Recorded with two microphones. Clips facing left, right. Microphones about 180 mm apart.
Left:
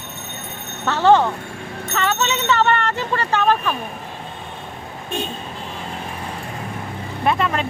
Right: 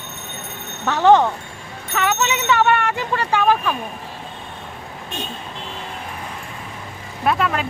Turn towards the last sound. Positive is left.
turn(degrees=0)  # may be behind; listen again after turning